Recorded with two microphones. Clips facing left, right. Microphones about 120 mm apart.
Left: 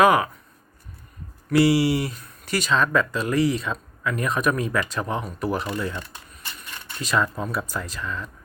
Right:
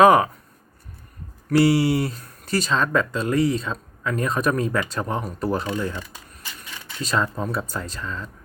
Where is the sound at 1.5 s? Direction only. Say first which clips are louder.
Right 1 dB; 30° right (ahead or behind).